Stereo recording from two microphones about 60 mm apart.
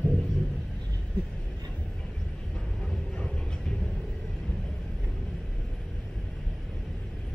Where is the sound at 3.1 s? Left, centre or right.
Centre.